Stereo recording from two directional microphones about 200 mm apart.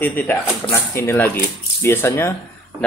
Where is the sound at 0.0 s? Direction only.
10° left (ahead or behind).